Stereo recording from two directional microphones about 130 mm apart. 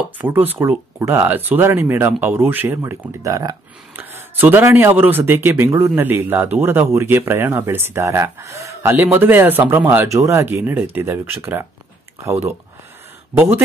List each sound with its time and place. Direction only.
0.2 s speech: 15° right (ahead or behind)
3.9 s speech: 15° right (ahead or behind)